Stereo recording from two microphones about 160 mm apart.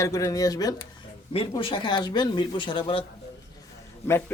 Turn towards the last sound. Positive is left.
turn(degrees=15)  # may be behind; listen again after turning